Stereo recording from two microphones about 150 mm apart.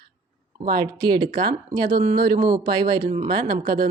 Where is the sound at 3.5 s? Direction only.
75° right (ahead or behind).